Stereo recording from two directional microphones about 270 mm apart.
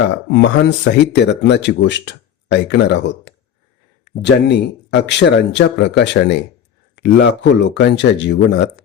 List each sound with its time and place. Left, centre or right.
0.3 s speech: left